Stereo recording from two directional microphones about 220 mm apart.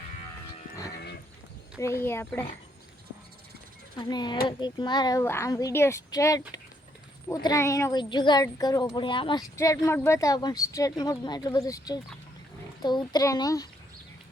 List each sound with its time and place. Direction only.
1.8 s a woman's voice: 10° left (ahead or behind)
3.9 s a woman's voice: 20° left (ahead or behind)